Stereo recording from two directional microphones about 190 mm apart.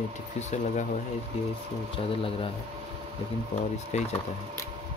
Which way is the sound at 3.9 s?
35° left (ahead or behind).